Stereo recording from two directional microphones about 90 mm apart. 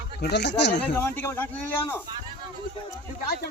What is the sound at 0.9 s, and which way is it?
Speech, 25° left (ahead or behind).